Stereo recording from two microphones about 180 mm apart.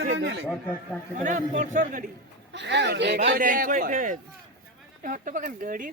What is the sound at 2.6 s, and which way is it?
Speech, 75° right (ahead or behind).